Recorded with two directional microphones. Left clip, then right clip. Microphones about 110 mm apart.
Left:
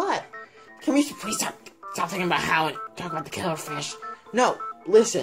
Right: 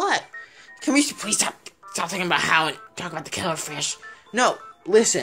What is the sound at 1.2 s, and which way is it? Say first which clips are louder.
Speech: right 4 dB; 10° right (ahead or behind).